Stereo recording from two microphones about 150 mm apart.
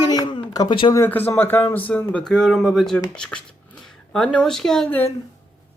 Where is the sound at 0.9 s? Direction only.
10° left (ahead or behind).